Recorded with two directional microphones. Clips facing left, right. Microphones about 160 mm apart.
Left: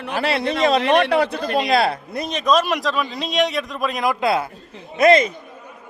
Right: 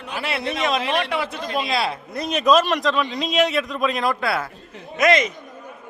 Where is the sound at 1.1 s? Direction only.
40° left (ahead or behind).